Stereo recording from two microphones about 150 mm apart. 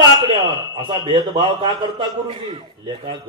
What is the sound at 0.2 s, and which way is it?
A man's voice, 30° right (ahead or behind).